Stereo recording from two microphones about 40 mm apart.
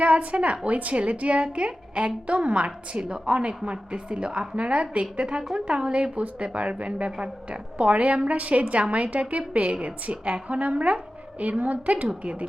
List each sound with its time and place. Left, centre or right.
0.0 s a woman's voice: right